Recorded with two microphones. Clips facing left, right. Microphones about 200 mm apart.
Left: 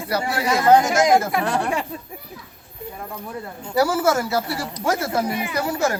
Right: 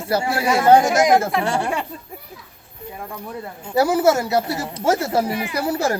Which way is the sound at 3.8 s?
20° right (ahead or behind).